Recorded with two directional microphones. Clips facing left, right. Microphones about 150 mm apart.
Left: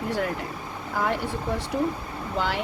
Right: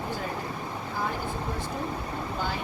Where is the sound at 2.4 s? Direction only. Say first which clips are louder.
Left 7 dB; 85° left.